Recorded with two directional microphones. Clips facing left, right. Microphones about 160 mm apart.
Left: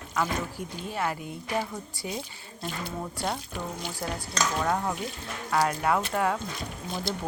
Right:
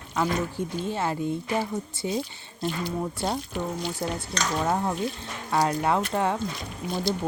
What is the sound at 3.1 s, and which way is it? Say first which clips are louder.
Speech: right 3 dB; 20° right (ahead or behind).